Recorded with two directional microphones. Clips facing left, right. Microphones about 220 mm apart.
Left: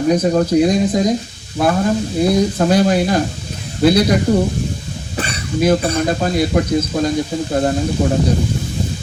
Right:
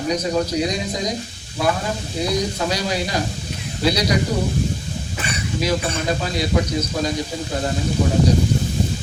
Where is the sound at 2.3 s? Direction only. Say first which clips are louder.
Left 7 dB; 55° left (ahead or behind).